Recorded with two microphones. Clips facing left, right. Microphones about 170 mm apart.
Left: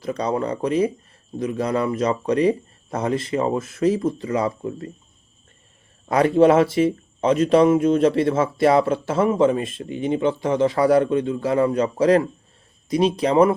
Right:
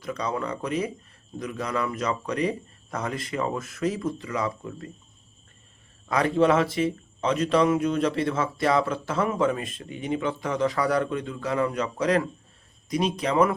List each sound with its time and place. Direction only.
0.0 s a man's voice: 35° left (ahead or behind)
6.1 s a man's voice: 30° left (ahead or behind)